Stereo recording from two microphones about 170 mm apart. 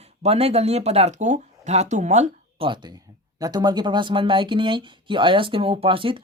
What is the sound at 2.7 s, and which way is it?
Speech, 25° right (ahead or behind).